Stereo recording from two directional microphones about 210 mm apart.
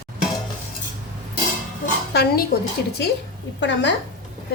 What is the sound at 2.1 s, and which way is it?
Speech, 50° left (ahead or behind).